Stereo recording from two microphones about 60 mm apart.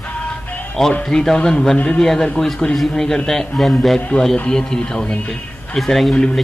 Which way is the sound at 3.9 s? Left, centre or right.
Centre.